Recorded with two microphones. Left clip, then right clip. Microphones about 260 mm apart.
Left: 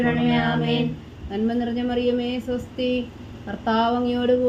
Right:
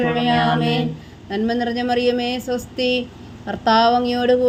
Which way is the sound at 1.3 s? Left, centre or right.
Right.